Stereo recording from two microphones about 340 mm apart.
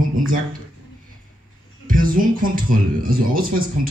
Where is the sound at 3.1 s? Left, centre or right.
Right.